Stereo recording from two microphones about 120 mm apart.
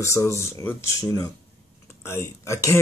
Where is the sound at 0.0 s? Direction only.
25° left (ahead or behind).